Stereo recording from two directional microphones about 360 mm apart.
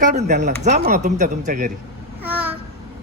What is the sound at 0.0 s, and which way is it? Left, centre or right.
Speech, centre.